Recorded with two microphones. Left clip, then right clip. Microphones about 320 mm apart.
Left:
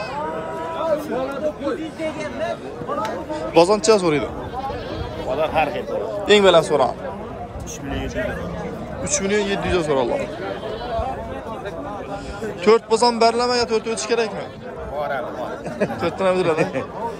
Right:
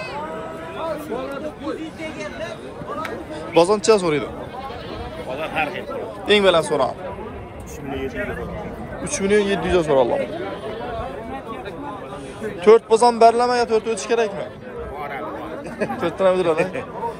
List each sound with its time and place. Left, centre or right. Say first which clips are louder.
1.6 s speech: left 4 dB; left
3.5 s a man's voice: left 1 dB; centre
5.3 s speech: left 4 dB; left
6.2 s a man's voice: left 2 dB; centre
9.1 s a man's voice: right 2 dB; centre
12.6 s a man's voice: right 3 dB; centre
16.0 s a man's voice: right 2 dB; centre